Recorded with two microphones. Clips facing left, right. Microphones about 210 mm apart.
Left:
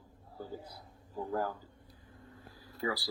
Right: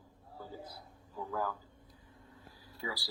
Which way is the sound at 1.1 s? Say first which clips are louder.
Left 4 dB; 35° left (ahead or behind).